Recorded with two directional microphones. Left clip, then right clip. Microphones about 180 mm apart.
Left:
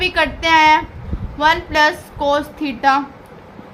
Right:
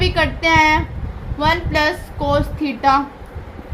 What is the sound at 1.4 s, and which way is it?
A woman's voice, 30° left (ahead or behind).